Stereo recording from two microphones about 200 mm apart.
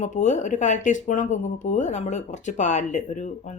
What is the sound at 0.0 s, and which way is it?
Speech, 35° left (ahead or behind).